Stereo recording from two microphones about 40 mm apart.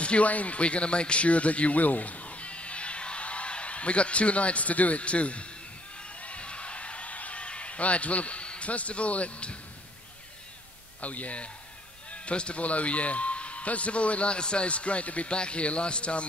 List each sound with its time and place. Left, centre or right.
0.0 s a man's voice: left
6.2 s a sound: left
11.0 s a man's voice: left